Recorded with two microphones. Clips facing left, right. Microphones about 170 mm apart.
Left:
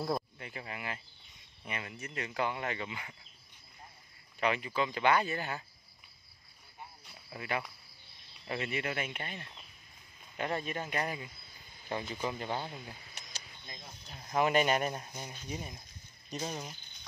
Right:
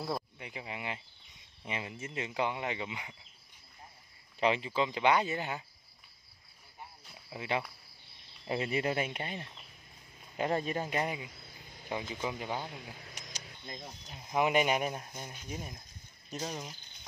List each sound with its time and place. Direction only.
0.4 s speech: 15° right (ahead or behind)
4.4 s speech: 25° right (ahead or behind)
7.2 s speech: 20° right (ahead or behind)
8.5 s speech: 30° right (ahead or behind)
10.5 s speech: 35° right (ahead or behind)
10.8 s speech: 20° right (ahead or behind)
11.9 s speech: 10° right (ahead or behind)
14.0 s speech: 15° right (ahead or behind); by 16.7 s centre (ahead or behind)